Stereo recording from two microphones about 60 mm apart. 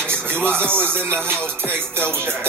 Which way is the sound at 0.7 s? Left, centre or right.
Right.